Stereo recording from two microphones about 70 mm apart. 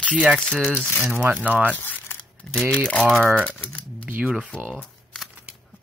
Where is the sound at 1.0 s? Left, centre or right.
Right.